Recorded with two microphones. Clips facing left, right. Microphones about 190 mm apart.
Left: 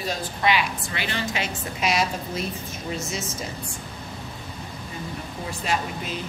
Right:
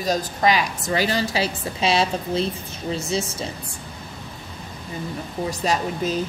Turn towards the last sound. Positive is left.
turn(degrees=-40)  # may be behind; listen again after turning